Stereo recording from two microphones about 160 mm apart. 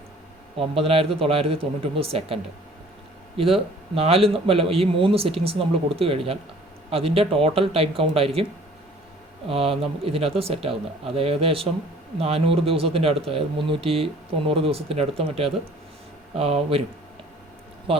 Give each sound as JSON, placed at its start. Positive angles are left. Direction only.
{"t": 0.5, "sound": "speech", "side_deg": -35}
{"t": 9.5, "sound": "speech", "side_deg": -35}